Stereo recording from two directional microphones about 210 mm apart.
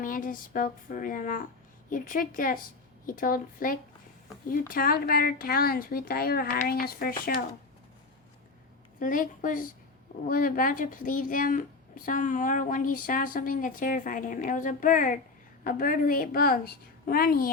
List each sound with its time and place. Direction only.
0.0 s a woman's voice: 40° left (ahead or behind)
9.0 s a woman's voice: 40° left (ahead or behind)